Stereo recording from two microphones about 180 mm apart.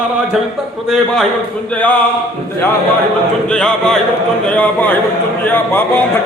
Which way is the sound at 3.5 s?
5° left (ahead or behind).